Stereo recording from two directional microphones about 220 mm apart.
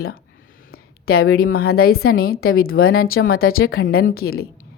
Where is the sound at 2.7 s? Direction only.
70° left (ahead or behind).